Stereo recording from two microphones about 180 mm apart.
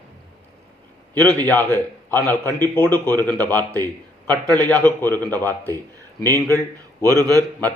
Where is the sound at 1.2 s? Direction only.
10° left (ahead or behind).